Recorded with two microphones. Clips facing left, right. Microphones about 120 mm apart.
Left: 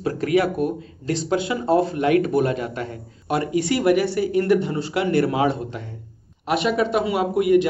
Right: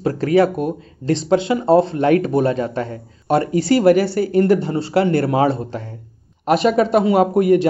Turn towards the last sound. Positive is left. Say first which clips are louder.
# right 4 dB
turn(degrees=-40)  # may be behind; listen again after turning